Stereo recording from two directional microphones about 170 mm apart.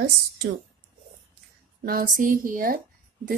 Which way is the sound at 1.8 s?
55° right (ahead or behind).